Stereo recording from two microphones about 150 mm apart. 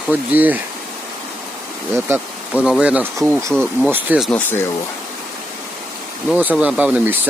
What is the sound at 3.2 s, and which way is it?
Speech, 20° right (ahead or behind).